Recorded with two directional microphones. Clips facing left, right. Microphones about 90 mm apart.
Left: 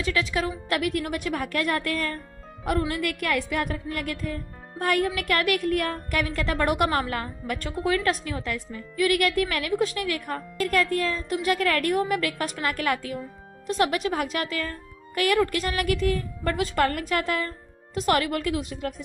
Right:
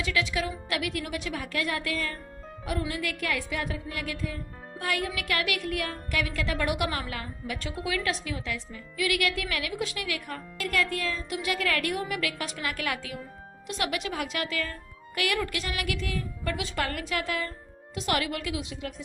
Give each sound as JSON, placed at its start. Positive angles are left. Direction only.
{"t": 0.0, "sound": "speech", "side_deg": 40}